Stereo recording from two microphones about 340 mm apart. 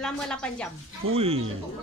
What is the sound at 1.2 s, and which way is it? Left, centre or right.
Speech, centre.